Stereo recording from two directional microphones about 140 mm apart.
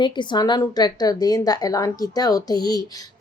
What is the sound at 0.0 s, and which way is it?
A woman's voice, 35° left (ahead or behind).